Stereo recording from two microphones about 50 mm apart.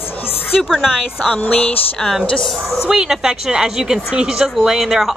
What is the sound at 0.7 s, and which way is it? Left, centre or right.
Speech, centre.